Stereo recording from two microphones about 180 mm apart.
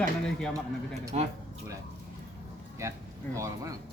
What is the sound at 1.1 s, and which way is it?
Speech, 40° right (ahead or behind).